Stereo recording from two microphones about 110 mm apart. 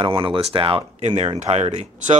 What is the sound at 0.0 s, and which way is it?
Speech, 50° right (ahead or behind).